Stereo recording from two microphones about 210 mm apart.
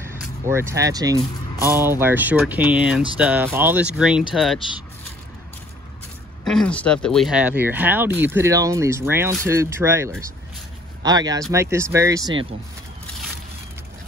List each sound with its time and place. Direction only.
0.5 s speech: 10° right (ahead or behind)
6.4 s speech: 5° left (ahead or behind); by 12.4 s 20° right (ahead or behind)